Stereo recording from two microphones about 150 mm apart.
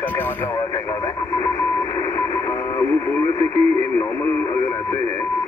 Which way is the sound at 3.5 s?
15° left (ahead or behind).